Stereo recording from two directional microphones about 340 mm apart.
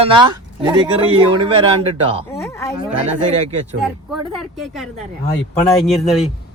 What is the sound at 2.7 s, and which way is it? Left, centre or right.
Speech, centre.